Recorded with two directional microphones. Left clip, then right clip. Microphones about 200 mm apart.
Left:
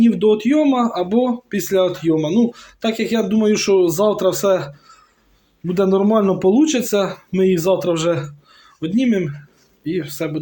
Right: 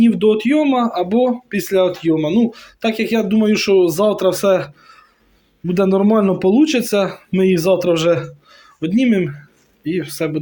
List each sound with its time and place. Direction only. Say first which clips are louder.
0.0 s speech: right 1 dB; 20° right (ahead or behind)